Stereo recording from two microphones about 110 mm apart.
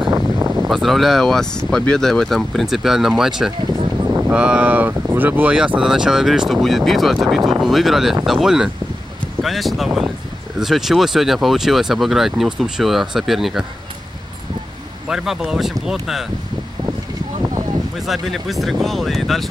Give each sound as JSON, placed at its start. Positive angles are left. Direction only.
{"t": 0.1, "sound": "a sound", "side_deg": -25}
{"t": 0.7, "sound": "speech", "side_deg": 0}
{"t": 4.0, "sound": "a sound", "side_deg": -25}
{"t": 4.3, "sound": "speech", "side_deg": -10}
{"t": 15.0, "sound": "speech", "side_deg": -5}
{"t": 18.0, "sound": "speech", "side_deg": 0}